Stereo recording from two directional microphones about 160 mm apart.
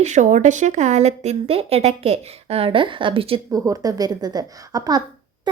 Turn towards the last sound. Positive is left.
turn(degrees=-25)  # may be behind; listen again after turning